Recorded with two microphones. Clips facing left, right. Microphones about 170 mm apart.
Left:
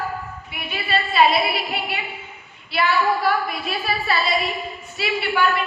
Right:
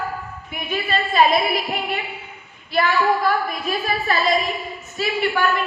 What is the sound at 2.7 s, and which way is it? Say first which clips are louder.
A woman's voice: right 1 dB; 45° right (ahead or behind).